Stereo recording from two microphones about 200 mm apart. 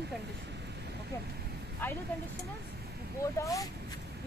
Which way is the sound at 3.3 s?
15° left (ahead or behind).